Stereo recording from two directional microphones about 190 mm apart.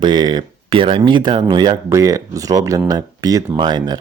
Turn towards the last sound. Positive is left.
turn(degrees=-20)  # may be behind; listen again after turning